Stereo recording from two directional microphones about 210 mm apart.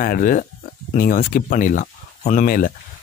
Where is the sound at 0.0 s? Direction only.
40° left (ahead or behind).